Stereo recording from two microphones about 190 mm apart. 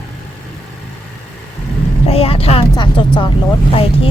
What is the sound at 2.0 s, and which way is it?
Vehicle, 30° left (ahead or behind).